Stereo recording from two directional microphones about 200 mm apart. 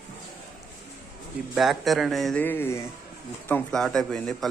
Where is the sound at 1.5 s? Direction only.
Centre (ahead or behind).